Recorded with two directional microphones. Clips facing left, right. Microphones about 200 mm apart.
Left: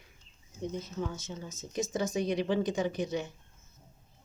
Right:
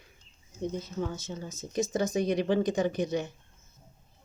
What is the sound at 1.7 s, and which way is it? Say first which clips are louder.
Speech: right 3 dB; 50° right (ahead or behind).